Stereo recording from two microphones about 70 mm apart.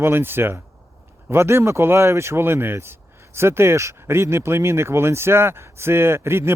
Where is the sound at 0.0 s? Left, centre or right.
Right.